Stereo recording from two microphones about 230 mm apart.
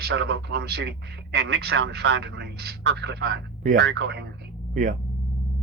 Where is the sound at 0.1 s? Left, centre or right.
Right.